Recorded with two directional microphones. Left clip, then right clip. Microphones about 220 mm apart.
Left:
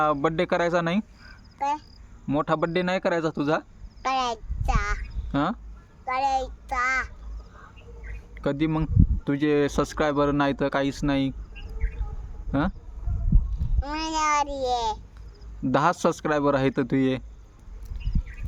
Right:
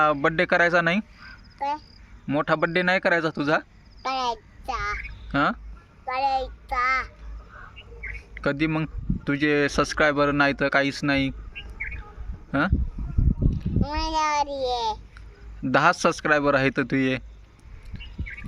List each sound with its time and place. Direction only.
0.0 s speech: 10° left (ahead or behind)
2.2 s insect: 5° left (ahead or behind)
6.2 s child singing: 25° left (ahead or behind)
6.7 s a child's voice: centre (ahead or behind)
8.4 s speech: 10° left (ahead or behind)
12.5 s speech: 10° left (ahead or behind)
13.8 s a child's voice: 5° left (ahead or behind)